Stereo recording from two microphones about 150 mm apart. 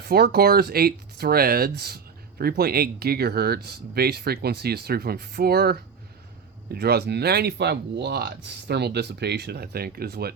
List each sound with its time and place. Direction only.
0.1 s speech: 90° right
6.7 s speech: 90° right